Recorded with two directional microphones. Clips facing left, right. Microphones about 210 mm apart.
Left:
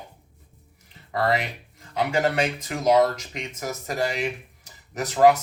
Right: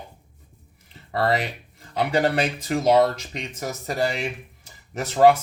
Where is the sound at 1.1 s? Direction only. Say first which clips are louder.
Right 1 dB; 35° right (ahead or behind).